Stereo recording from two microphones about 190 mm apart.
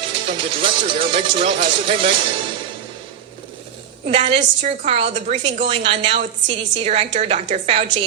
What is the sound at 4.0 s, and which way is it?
A woman's voice, 30° right (ahead or behind).